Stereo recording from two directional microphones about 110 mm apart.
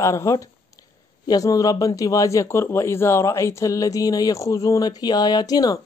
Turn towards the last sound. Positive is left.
turn(degrees=35)  # may be behind; listen again after turning